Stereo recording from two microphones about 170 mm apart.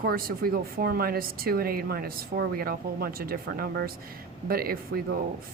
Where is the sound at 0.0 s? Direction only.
60° right (ahead or behind).